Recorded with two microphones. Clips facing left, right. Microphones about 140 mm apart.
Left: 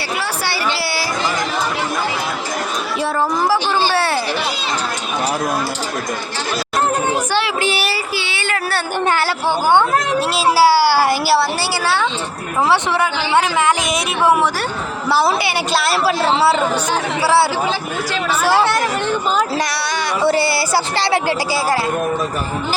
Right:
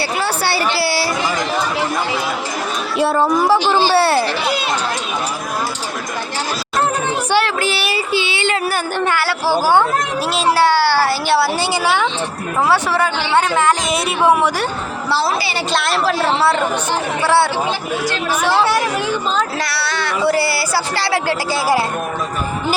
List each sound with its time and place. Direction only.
3.5 s speech: 30° right (ahead or behind)
8.1 s a sound: 20° right (ahead or behind)
9.5 s speech: 5° right (ahead or behind)
12.6 s speech: 20° left (ahead or behind)
13.8 s speech: centre (ahead or behind)
15.7 s speech: 5° left (ahead or behind)
18.6 s speech: 10° right (ahead or behind)
19.4 s speech: 15° left (ahead or behind)